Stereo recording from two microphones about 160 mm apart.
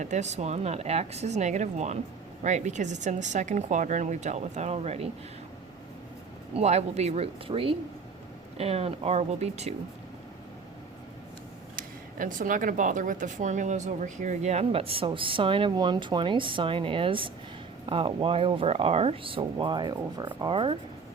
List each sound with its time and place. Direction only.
0.0 s speech: 45° right (ahead or behind)
6.5 s speech: 45° right (ahead or behind)
11.8 s speech: 55° right (ahead or behind); by 20.7 s 35° right (ahead or behind)